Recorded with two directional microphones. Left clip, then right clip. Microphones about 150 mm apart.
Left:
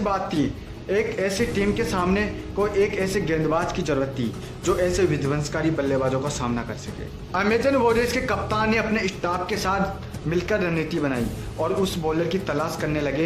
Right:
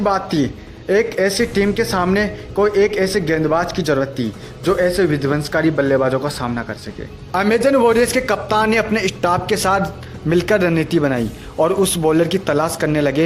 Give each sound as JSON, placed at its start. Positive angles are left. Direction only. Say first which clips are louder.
{"t": 0.0, "sound": "a man's voice", "louder": "right 6 dB", "side_deg": -40}
{"t": 7.3, "sound": "a man's voice", "louder": "right 6 dB", "side_deg": -45}